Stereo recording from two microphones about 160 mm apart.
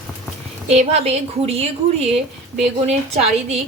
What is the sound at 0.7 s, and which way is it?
A woman's voice, 40° right (ahead or behind).